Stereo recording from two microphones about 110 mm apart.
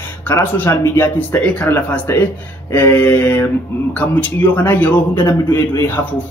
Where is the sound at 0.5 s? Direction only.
20° left (ahead or behind).